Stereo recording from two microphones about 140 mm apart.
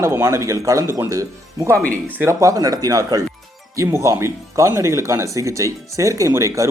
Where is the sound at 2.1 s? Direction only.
20° right (ahead or behind).